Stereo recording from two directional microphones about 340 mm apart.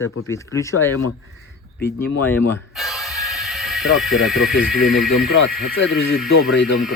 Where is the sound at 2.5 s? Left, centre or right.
Centre.